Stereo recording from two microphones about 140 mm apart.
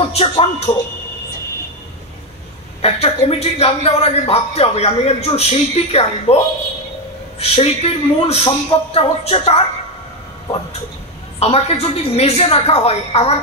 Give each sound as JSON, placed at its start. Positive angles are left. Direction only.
{"t": 0.0, "sound": "speech", "side_deg": 45}
{"t": 2.8, "sound": "speech", "side_deg": 45}
{"t": 11.3, "sound": "speech", "side_deg": 45}